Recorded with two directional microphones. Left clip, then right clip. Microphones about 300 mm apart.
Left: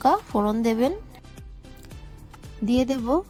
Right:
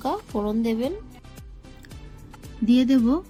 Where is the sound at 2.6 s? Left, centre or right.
Left.